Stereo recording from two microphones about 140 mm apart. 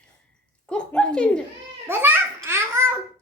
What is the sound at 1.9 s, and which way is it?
Babbling, 15° right (ahead or behind).